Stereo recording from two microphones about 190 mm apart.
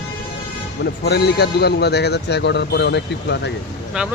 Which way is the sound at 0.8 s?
60° left (ahead or behind).